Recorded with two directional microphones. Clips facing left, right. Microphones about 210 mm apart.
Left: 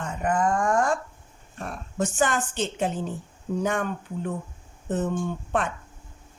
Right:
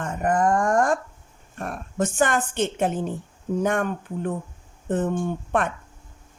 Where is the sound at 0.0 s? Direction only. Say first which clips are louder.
Right 3 dB; 50° right (ahead or behind).